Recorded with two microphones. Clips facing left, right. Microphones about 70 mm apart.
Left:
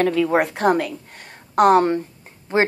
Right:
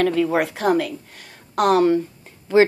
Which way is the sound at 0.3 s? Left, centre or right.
Left.